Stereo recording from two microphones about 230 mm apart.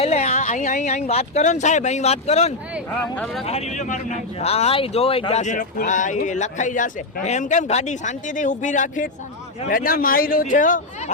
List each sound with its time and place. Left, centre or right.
0.0 s speech: left
2.9 s speech: centre
3.4 s speech: left